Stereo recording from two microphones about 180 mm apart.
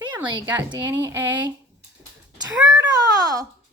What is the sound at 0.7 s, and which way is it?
Speech, 15° right (ahead or behind).